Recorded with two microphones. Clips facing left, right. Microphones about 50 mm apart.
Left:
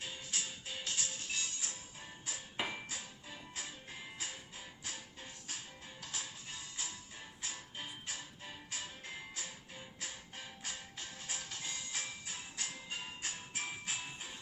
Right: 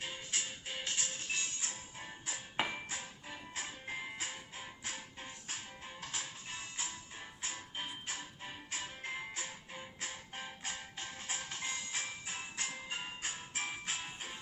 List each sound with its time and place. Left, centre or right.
0.0 s music: right